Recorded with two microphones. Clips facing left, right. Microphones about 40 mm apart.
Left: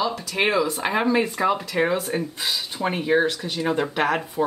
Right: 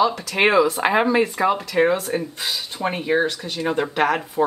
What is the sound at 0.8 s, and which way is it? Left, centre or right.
Speech, centre.